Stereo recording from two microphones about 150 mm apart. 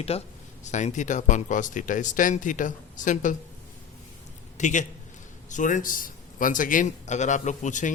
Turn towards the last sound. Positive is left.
turn(degrees=55)  # may be behind; listen again after turning